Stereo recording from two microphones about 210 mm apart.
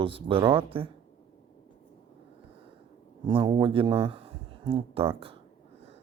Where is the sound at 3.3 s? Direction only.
25° right (ahead or behind).